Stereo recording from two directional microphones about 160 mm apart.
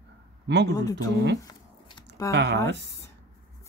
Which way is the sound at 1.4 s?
25° left (ahead or behind).